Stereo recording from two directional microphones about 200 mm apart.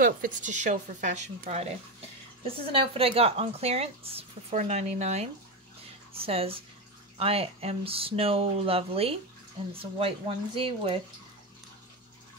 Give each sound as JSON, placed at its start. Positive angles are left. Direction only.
{"t": 0.0, "sound": "speech", "side_deg": -40}